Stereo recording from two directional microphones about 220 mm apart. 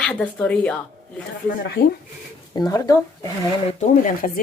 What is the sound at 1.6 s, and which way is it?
Speech, 45° left (ahead or behind).